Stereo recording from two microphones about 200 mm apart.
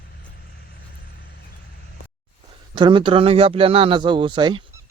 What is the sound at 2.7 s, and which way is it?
Speech, 25° right (ahead or behind).